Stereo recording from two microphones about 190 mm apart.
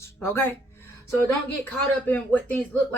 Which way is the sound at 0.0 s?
15° left (ahead or behind).